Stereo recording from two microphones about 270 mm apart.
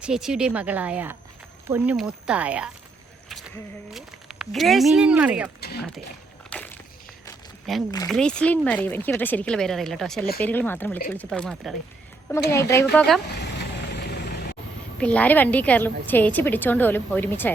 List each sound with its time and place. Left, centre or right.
0.0 s speech: centre
3.9 s speech: centre
5.5 s speech: left
6.5 s a sound: centre
7.9 s a woman's voice: centre
8.1 s a woman's voice: centre
13.4 s vehicle: left
15.0 s a woman's voice: centre